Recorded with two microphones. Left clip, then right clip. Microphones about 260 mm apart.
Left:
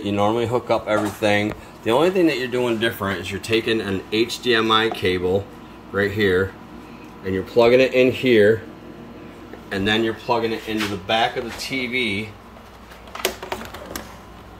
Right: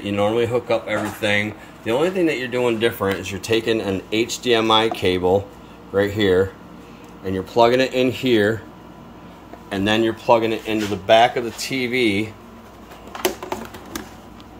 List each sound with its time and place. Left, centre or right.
0.0 s speech: centre
9.8 s speech: centre